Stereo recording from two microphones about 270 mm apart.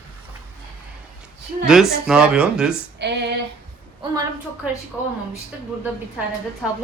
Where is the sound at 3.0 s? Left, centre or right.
Right.